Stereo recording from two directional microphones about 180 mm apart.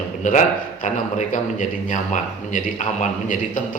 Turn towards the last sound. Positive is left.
turn(degrees=45)  # may be behind; listen again after turning